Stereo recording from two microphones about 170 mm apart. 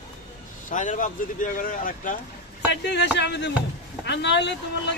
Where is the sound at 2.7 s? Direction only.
90° left.